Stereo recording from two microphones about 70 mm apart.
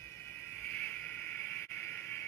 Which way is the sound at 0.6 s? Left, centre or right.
Left.